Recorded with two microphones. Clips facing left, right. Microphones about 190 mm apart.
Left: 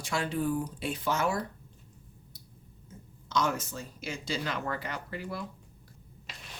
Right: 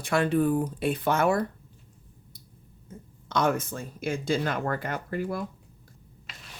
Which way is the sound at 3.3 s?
55° right (ahead or behind).